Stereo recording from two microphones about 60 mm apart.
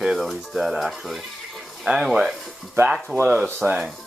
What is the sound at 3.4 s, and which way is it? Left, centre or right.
Speech, right.